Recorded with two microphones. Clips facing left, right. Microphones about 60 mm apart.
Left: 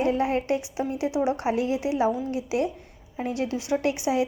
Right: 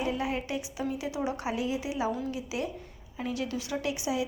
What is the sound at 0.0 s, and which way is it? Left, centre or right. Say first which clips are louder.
Speech: left 7 dB; left.